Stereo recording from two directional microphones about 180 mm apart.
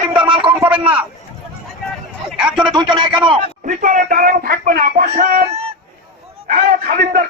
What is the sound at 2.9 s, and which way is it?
Speech, 25° right (ahead or behind).